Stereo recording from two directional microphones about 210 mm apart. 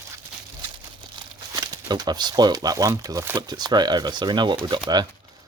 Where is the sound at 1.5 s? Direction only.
20° right (ahead or behind).